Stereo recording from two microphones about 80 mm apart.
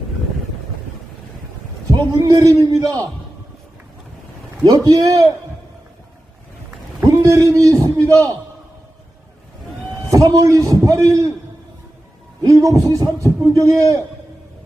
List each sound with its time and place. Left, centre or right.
1.9 s a man's voice: right
4.9 s a man's voice: right
7.0 s a man's voice: right
10.1 s a man's voice: right
12.5 s a man's voice: right